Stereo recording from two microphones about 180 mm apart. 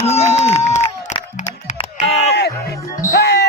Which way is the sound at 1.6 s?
35° left (ahead or behind).